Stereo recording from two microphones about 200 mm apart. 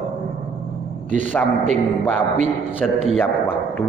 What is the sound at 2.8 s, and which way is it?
Speech, 5° left (ahead or behind).